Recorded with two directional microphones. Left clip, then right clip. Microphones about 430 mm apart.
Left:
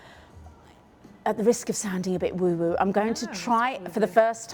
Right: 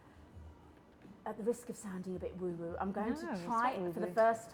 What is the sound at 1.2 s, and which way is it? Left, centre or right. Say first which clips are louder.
A woman's voice: left 15 dB; left.